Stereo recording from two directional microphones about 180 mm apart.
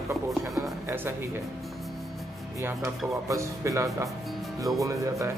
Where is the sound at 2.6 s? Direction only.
15° right (ahead or behind).